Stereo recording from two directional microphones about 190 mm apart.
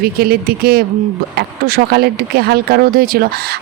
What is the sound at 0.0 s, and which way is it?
Speech, 55° right (ahead or behind).